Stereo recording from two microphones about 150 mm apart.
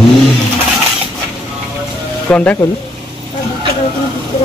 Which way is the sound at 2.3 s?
10° left (ahead or behind).